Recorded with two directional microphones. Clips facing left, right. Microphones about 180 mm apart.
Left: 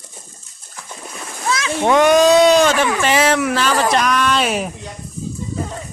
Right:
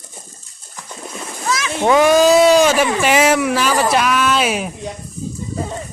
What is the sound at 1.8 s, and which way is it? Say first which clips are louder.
Speech: even; 5° right (ahead or behind).